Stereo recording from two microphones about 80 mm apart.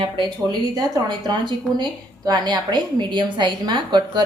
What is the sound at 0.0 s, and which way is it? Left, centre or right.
A woman's voice, right.